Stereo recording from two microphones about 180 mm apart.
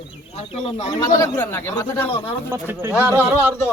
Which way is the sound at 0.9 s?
20° left (ahead or behind).